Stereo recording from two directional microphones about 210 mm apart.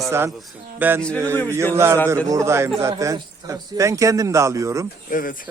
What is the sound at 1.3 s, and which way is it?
Speech, 10° left (ahead or behind).